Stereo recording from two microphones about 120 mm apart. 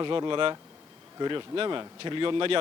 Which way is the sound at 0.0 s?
40° right (ahead or behind).